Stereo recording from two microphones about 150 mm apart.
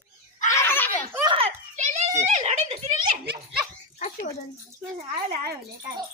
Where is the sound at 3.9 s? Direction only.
55° left (ahead or behind).